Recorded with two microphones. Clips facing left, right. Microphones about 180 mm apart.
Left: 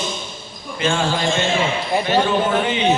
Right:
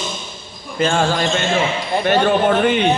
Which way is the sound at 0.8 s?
45° right (ahead or behind).